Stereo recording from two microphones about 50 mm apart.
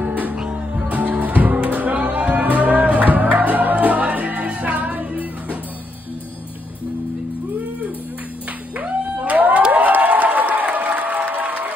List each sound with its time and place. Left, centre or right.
0.0 s music: right
0.4 s music: right
8.8 s a sound: right
9.7 s applause: right